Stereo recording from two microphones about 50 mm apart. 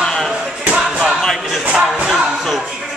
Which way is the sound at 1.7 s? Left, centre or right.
Right.